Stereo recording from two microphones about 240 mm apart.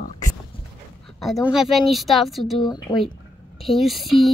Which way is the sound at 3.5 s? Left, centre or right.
Centre.